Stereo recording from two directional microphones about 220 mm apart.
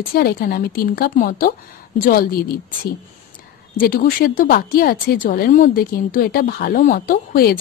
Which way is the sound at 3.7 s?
40° left (ahead or behind).